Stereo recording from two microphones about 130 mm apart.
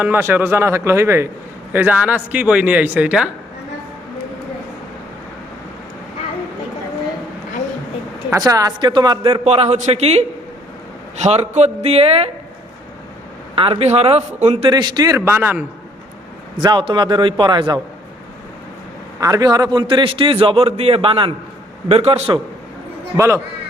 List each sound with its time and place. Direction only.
0.0 s a man's voice: 15° right (ahead or behind)
8.3 s a man's voice: 25° right (ahead or behind)
9.4 s a man's voice: 55° right (ahead or behind)
13.6 s a man's voice: 50° right (ahead or behind)
14.7 s a man's voice: 35° right (ahead or behind); by 15.6 s 15° right (ahead or behind)
16.6 s a man's voice: 35° right (ahead or behind)
19.2 s a man's voice: 30° right (ahead or behind); by 22.4 s 50° right (ahead or behind)
23.1 s a man's voice: 20° right (ahead or behind)